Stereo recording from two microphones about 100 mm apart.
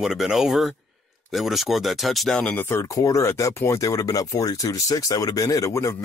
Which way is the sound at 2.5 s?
25° left (ahead or behind).